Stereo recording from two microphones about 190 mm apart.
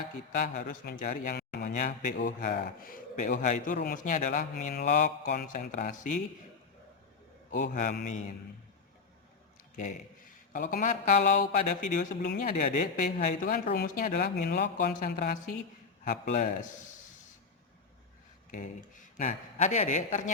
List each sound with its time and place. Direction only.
0.3 s speech: 45° left (ahead or behind)
1.6 s a man's voice: 40° left (ahead or behind)
7.6 s speech: 45° left (ahead or behind)
9.7 s a man's voice: 40° left (ahead or behind)
14.6 s speech: 65° left (ahead or behind)
14.9 s a man's voice: 45° left (ahead or behind)
18.5 s a man's voice: 45° left (ahead or behind)